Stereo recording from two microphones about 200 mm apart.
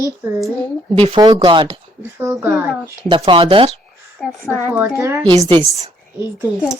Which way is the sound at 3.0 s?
25° right (ahead or behind).